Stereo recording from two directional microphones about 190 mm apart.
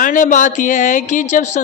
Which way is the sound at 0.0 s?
45° left (ahead or behind).